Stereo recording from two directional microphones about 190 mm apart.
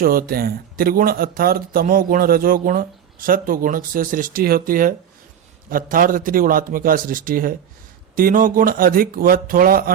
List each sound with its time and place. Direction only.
0.0 s speech: 50° right (ahead or behind)